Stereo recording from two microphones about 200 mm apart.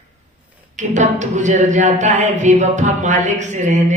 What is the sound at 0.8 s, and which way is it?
Speech, 35° right (ahead or behind).